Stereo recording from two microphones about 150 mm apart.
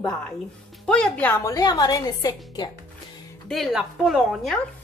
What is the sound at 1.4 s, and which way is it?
A woman's voice, 25° left (ahead or behind).